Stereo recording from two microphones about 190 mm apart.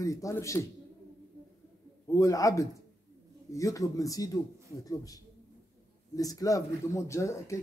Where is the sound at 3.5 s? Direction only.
15° left (ahead or behind).